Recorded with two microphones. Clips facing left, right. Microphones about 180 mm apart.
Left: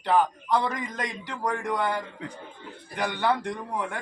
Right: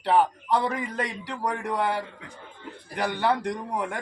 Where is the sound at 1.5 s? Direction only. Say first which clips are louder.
Even; 35° right (ahead or behind).